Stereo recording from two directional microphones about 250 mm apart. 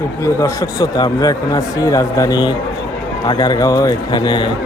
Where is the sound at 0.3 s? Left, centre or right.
Centre.